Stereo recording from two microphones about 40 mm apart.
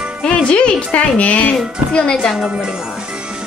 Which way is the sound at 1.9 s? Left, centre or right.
Left.